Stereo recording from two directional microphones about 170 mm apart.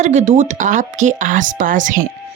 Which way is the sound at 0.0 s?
45° right (ahead or behind).